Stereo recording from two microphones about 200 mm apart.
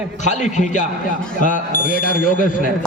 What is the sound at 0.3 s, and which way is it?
A man's voice, 35° left (ahead or behind).